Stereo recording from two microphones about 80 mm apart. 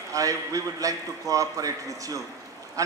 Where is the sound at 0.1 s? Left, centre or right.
Right.